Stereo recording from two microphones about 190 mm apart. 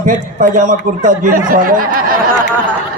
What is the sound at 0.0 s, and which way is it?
Speech, 45° right (ahead or behind).